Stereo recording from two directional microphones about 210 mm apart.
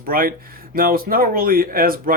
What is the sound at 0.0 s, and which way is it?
Speech, 45° right (ahead or behind).